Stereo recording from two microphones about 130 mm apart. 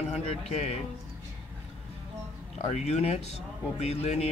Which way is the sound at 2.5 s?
60° left (ahead or behind).